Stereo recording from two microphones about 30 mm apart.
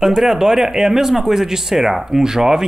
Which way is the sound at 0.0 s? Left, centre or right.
Centre.